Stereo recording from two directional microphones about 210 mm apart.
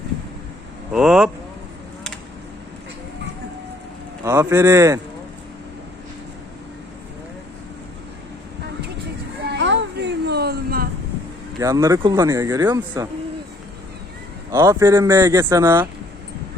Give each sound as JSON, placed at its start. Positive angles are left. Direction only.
{"t": 0.9, "sound": "speech", "side_deg": -5}
{"t": 4.2, "sound": "speech", "side_deg": -10}
{"t": 9.5, "sound": "a sound", "side_deg": -55}
{"t": 11.6, "sound": "speech", "side_deg": -15}
{"t": 14.5, "sound": "speech", "side_deg": -15}